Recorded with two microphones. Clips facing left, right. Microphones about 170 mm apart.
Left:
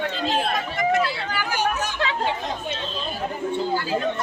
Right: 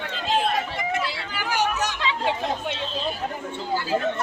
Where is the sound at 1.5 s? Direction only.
75° right (ahead or behind).